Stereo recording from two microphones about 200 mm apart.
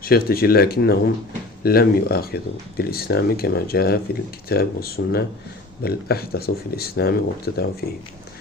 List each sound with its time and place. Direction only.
0.0 s speech: 50° left (ahead or behind)